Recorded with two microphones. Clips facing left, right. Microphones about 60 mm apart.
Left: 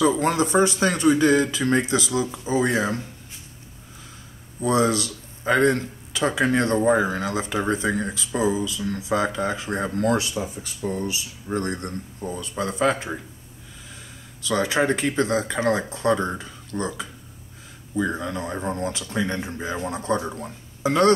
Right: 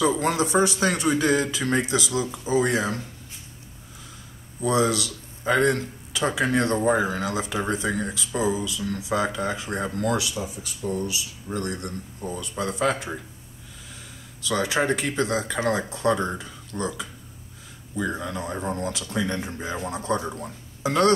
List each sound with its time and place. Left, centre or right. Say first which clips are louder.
0.2 s speech: left 2 dB; left
4.6 s speech: left 2 dB; left
14.5 s speech: left 2 dB; left